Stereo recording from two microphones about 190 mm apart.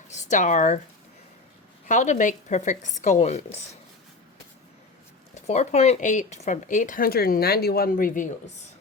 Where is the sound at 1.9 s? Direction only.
40° left (ahead or behind).